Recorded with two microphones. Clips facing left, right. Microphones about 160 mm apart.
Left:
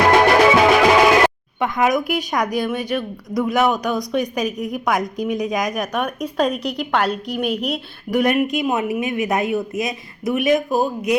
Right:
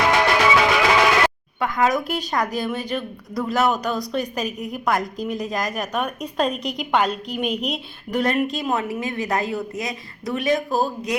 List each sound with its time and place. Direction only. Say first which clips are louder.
0.2 s music: left 5 dB; 45° left (ahead or behind)
1.5 s speech: even; 20° left (ahead or behind)
5.4 s speech: left 4 dB; centre (ahead or behind)
5.9 s speech: left 3 dB; 10° left (ahead or behind)